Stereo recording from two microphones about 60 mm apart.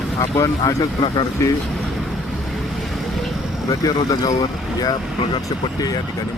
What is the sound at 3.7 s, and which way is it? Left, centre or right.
Speech, left.